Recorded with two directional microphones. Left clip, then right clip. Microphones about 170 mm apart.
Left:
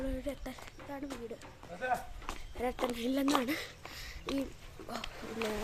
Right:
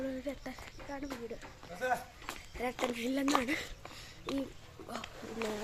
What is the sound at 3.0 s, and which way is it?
Speech, 15° left (ahead or behind).